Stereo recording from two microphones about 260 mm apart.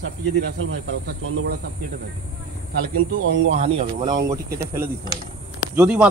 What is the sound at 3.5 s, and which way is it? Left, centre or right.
A man's voice, right.